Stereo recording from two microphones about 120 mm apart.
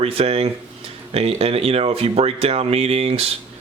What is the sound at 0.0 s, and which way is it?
Speech, 55° right (ahead or behind).